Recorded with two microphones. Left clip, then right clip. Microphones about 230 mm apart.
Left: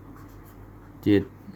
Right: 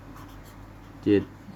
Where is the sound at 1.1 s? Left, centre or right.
Left.